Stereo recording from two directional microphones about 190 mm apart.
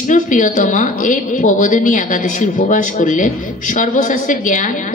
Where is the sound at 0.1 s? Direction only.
40° left (ahead or behind).